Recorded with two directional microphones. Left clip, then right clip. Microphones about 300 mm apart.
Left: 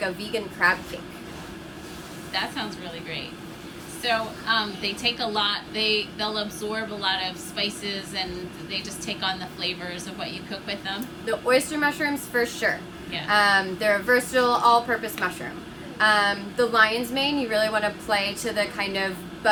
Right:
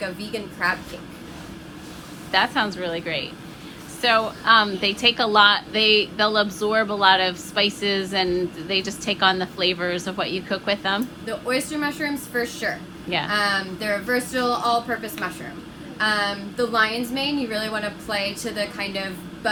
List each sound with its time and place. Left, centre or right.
0.0 s a woman's voice: centre
2.3 s a woman's voice: centre